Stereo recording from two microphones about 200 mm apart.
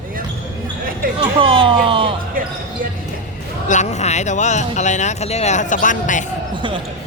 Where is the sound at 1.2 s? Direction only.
25° right (ahead or behind).